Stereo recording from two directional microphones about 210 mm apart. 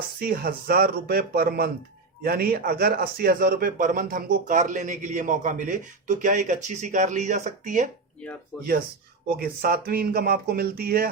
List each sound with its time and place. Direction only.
0.2 s speech: 45° right (ahead or behind)
8.5 s speech: centre (ahead or behind)
9.2 s speech: 45° right (ahead or behind)